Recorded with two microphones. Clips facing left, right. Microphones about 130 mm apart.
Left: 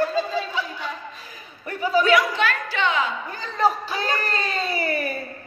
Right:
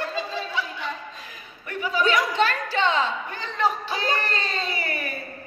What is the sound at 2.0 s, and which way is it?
A woman's voice, 35° right (ahead or behind).